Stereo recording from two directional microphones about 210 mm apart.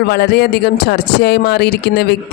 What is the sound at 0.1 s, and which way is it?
A man's voice, 50° left (ahead or behind).